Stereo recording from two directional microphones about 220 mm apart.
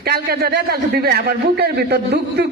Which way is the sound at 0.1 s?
45° right (ahead or behind).